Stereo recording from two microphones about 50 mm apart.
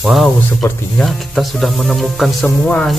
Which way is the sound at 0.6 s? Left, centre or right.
Left.